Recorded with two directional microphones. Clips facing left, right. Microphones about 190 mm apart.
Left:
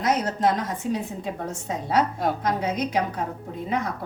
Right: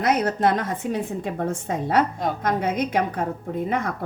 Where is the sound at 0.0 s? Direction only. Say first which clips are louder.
Right 2 dB; 60° right (ahead or behind).